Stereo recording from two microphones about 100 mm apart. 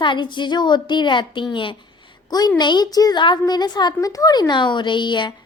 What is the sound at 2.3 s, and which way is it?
A child's voice, 40° left (ahead or behind).